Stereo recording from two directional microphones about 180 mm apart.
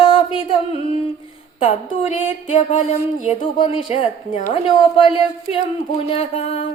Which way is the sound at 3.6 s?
30° left (ahead or behind).